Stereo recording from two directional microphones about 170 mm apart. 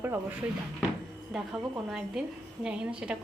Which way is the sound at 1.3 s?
Centre (ahead or behind).